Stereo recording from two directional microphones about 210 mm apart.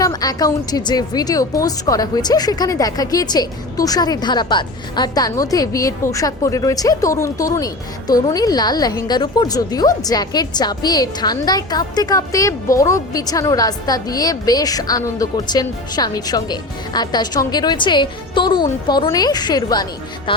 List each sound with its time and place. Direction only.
0.0 s a woman's voice: 20° left (ahead or behind)